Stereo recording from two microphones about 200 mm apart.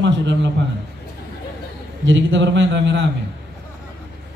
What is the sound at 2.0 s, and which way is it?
A man's voice, 70° right (ahead or behind).